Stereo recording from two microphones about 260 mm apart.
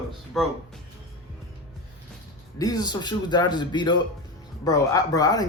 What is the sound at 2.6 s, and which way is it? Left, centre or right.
Speech, centre.